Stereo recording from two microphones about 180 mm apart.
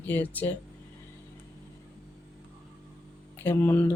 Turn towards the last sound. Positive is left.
turn(degrees=10)  # may be behind; listen again after turning